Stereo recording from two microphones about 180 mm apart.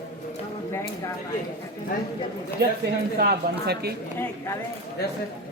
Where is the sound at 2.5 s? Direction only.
65° right (ahead or behind).